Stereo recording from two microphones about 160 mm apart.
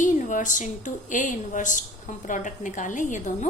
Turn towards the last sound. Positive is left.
turn(degrees=50)  # may be behind; listen again after turning